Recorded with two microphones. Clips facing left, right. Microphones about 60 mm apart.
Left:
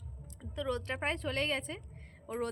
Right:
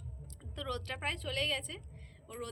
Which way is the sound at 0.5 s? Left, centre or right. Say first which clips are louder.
Left 4 dB; centre.